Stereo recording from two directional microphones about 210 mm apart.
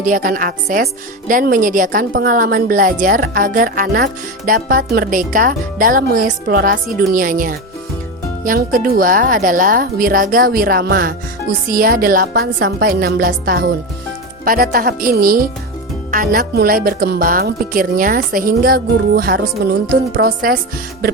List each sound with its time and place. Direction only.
0.0 s a woman's voice: 40° right (ahead or behind)